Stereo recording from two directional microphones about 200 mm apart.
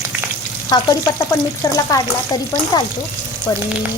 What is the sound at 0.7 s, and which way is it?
Frying, 15° left (ahead or behind).